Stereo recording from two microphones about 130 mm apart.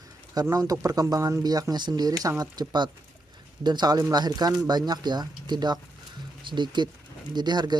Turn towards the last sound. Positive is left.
turn(degrees=-35)  # may be behind; listen again after turning